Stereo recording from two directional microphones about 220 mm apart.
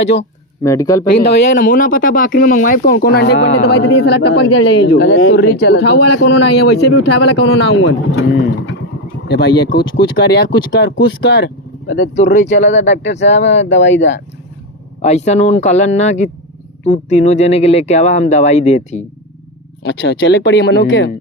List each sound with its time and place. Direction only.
0.0 s speech: 55° left (ahead or behind)
0.6 s speech: 15° left (ahead or behind)
1.0 s speech: 40° left (ahead or behind)
15.0 s speech: 30° left (ahead or behind)
19.8 s speech: 50° left (ahead or behind)